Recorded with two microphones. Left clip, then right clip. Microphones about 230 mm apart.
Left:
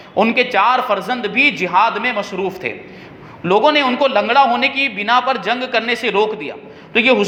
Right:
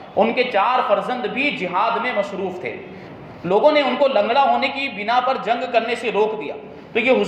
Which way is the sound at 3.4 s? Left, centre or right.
Left.